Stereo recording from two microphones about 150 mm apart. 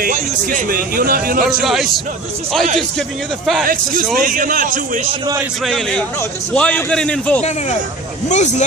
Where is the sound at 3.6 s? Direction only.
70° right (ahead or behind).